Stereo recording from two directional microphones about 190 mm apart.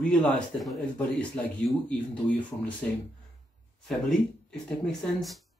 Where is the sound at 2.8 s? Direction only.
5° left (ahead or behind).